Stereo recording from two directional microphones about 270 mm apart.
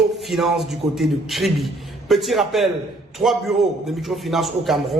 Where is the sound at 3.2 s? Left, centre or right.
Centre.